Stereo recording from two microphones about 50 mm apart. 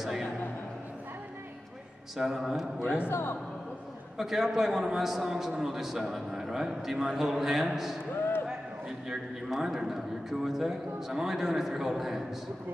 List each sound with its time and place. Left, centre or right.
0.0 s a sound: centre
2.1 s a man's voice: centre
3.1 s a man's voice: left
4.2 s a man's voice: centre
8.1 s a sound: left
8.5 s a man's voice: centre